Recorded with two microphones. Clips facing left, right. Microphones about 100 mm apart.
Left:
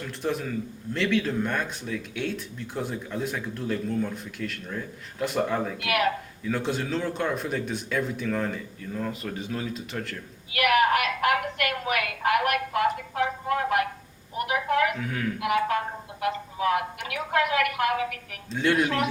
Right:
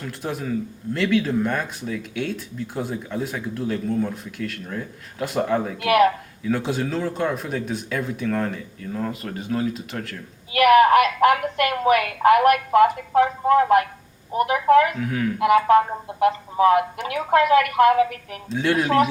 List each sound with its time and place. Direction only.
0.2 s speech: centre (ahead or behind)
5.8 s a woman's voice: 35° right (ahead or behind)
6.5 s speech: 5° right (ahead or behind)
9.6 s speech: centre (ahead or behind)
10.5 s a woman's voice: 35° right (ahead or behind)
14.9 s speech: 5° right (ahead or behind)
15.4 s a woman's voice: 35° right (ahead or behind)
18.4 s speech: 5° right (ahead or behind)